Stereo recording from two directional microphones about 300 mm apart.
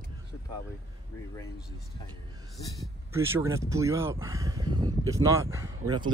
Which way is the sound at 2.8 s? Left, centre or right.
Centre.